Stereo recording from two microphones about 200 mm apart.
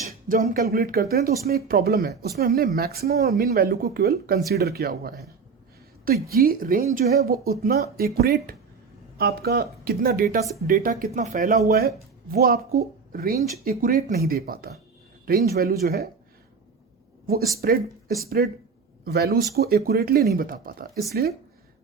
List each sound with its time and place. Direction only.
0.3 s a woman's voice: 45° right (ahead or behind)
17.6 s a woman's voice: 50° right (ahead or behind)